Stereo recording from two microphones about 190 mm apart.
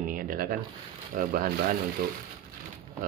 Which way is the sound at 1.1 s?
50° right (ahead or behind).